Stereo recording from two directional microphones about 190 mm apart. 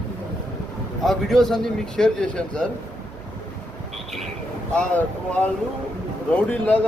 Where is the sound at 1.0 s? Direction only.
Centre (ahead or behind).